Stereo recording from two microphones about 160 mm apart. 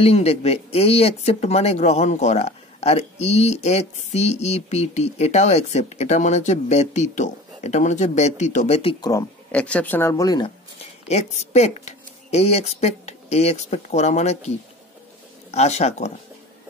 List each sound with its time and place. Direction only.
0.0 s speech: 40° left (ahead or behind)
9.5 s speech: 5° left (ahead or behind); by 10.5 s 25° left (ahead or behind)
11.1 s speech: 45° left (ahead or behind)
15.5 s speech: 45° left (ahead or behind)